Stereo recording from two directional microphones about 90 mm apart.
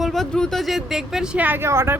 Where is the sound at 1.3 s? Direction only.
20° right (ahead or behind).